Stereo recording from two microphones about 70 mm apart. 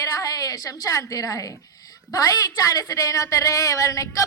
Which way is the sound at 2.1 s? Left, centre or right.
Left.